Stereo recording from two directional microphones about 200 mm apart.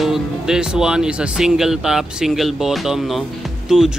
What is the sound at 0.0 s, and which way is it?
Speech, centre (ahead or behind).